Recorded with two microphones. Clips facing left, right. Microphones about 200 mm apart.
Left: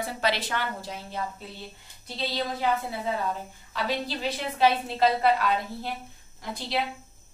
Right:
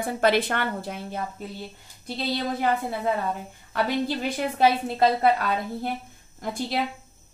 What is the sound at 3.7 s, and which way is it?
A woman's voice, 55° right (ahead or behind).